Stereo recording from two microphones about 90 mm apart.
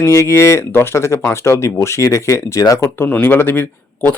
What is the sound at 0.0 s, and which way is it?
Speech, 30° left (ahead or behind).